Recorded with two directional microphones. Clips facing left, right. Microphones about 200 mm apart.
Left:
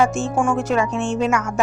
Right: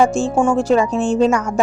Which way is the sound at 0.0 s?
30° right (ahead or behind).